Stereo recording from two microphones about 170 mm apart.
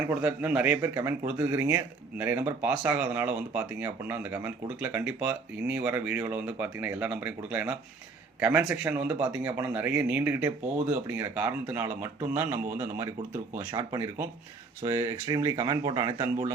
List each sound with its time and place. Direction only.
0.0 s speech: 10° right (ahead or behind)